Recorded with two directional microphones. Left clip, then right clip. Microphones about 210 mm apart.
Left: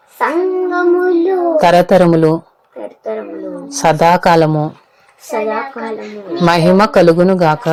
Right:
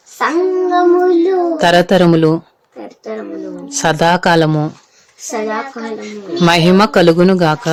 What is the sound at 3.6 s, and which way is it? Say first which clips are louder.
Speech: left 2 dB; centre (ahead or behind).